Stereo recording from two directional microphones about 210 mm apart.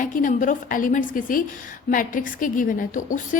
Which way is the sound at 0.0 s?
40° left (ahead or behind).